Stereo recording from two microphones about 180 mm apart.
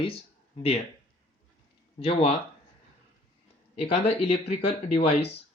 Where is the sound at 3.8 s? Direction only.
35° left (ahead or behind).